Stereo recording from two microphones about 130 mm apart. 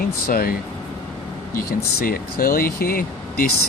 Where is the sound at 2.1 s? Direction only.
90° left.